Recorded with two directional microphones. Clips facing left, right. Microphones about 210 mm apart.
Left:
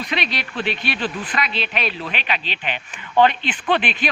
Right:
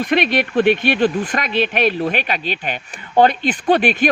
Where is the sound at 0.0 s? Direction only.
50° right (ahead or behind).